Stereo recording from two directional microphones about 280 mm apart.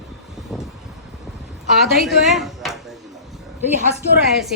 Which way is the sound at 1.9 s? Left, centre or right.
Centre.